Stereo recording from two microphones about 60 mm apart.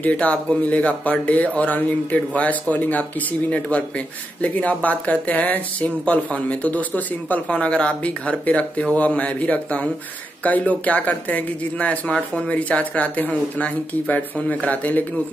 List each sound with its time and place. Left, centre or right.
0.0 s speech: left